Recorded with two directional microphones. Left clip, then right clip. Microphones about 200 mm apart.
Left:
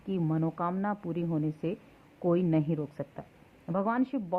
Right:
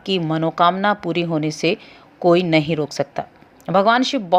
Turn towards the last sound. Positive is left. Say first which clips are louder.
# right 15 dB
turn(degrees=-25)  # may be behind; listen again after turning